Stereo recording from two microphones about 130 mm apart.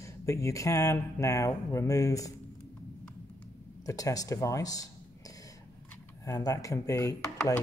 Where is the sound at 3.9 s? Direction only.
25° left (ahead or behind).